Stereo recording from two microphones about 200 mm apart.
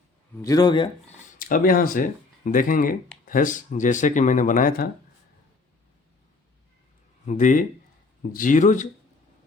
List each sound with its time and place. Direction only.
0.4 s speech: 20° left (ahead or behind)
1.4 s speech: 45° left (ahead or behind)
7.3 s speech: 40° left (ahead or behind)